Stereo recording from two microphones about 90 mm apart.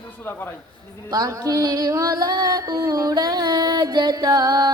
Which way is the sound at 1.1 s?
45° right (ahead or behind).